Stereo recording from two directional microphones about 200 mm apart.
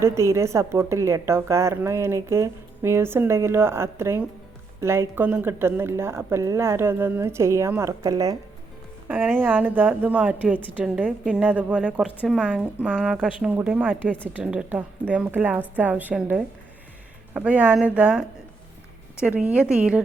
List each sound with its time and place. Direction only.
0.0 s speech: 15° right (ahead or behind)
14.0 s speech: 5° left (ahead or behind)
14.3 s speech: 5° right (ahead or behind)